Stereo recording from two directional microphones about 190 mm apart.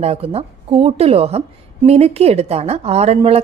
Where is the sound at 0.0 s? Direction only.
30° right (ahead or behind).